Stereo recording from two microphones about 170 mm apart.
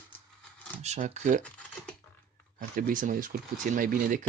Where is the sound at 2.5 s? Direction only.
50° right (ahead or behind).